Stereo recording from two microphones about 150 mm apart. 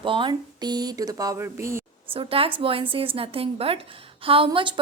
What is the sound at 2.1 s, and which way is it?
A woman's voice, 35° right (ahead or behind).